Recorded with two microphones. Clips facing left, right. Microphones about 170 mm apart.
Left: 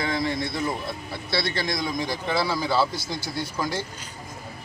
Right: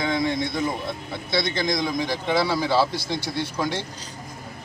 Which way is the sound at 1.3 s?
20° right (ahead or behind).